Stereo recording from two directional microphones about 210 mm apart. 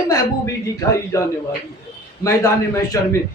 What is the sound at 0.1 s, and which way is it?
A woman's voice, 15° left (ahead or behind).